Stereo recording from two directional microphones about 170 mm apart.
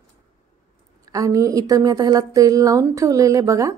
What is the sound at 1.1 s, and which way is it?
Speech, 20° right (ahead or behind).